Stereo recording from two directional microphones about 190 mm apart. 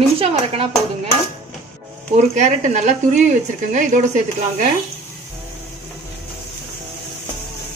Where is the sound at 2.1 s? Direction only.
40° right (ahead or behind).